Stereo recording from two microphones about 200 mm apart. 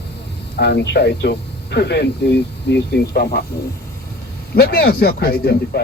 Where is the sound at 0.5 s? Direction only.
55° left (ahead or behind).